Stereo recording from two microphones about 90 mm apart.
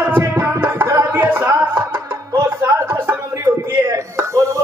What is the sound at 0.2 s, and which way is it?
Music, 25° right (ahead or behind).